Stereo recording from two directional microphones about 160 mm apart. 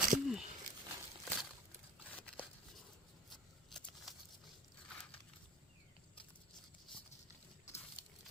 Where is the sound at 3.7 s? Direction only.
Centre (ahead or behind).